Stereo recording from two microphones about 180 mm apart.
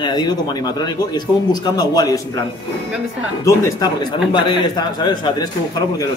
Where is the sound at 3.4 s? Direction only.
20° left (ahead or behind).